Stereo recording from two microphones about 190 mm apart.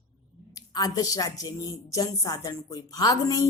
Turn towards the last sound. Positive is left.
turn(degrees=20)  # may be behind; listen again after turning